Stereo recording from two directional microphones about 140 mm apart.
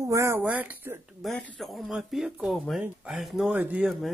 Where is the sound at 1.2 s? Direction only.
Centre (ahead or behind).